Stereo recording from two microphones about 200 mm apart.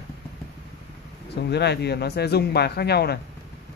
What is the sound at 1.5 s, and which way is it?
Speech, 55° left (ahead or behind).